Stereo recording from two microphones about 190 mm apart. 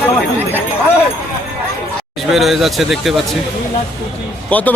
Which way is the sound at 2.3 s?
Centre (ahead or behind).